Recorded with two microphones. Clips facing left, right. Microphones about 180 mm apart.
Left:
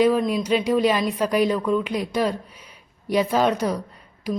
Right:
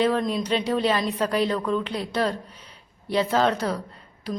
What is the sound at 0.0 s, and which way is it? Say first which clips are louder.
Speech: left 4 dB; 10° left (ahead or behind).